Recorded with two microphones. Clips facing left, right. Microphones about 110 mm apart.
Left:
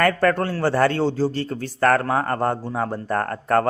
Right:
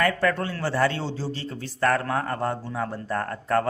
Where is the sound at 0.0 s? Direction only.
55° left (ahead or behind).